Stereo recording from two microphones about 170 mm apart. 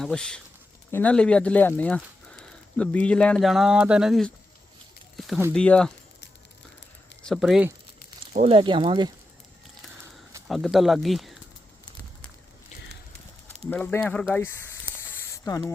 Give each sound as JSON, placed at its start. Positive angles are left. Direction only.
{"t": 0.0, "sound": "speech", "side_deg": 5}
{"t": 5.1, "sound": "a sound", "side_deg": 0}
{"t": 5.5, "sound": "speech", "side_deg": 5}
{"t": 7.3, "sound": "speech", "side_deg": 0}
{"t": 8.4, "sound": "speech", "side_deg": -30}
{"t": 10.5, "sound": "speech", "side_deg": 0}
{"t": 13.7, "sound": "speech", "side_deg": 10}
{"t": 15.0, "sound": "a sound", "side_deg": 15}